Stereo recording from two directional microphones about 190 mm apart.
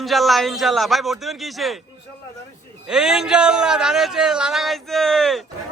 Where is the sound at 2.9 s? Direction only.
Centre (ahead or behind).